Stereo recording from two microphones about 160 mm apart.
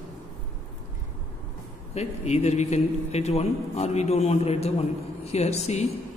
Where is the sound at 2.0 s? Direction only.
45° left (ahead or behind).